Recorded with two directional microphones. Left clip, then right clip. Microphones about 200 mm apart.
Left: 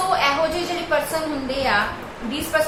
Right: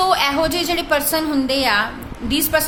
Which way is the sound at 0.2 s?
60° right (ahead or behind).